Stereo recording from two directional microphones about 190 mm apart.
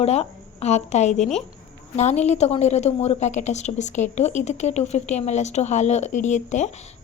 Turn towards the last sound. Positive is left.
turn(degrees=40)  # may be behind; listen again after turning